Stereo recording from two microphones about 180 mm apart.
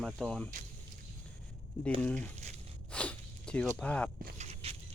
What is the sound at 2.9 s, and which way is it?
Sneeze, 5° left (ahead or behind).